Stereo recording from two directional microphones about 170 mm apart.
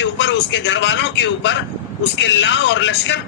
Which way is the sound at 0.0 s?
90° left.